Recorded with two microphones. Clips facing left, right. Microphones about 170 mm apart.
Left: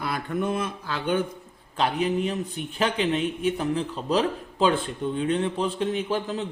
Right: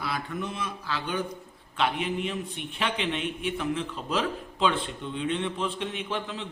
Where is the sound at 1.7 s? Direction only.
40° left (ahead or behind).